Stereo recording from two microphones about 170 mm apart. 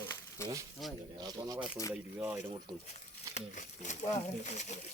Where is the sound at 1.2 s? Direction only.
20° right (ahead or behind).